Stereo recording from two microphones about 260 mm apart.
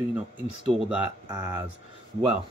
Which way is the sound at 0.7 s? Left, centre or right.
Centre.